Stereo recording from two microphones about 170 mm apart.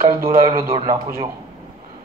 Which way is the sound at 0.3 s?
35° right (ahead or behind).